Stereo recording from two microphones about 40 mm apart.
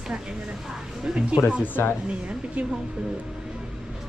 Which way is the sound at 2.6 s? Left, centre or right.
Right.